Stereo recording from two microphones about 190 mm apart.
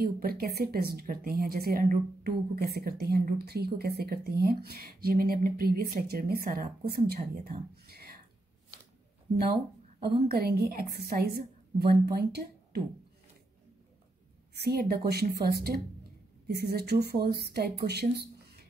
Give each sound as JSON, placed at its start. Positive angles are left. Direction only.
{"t": 0.0, "sound": "a woman's voice", "side_deg": -50}
{"t": 10.2, "sound": "speech", "side_deg": -55}
{"t": 14.6, "sound": "speech", "side_deg": -55}
{"t": 18.1, "sound": "a sound", "side_deg": -55}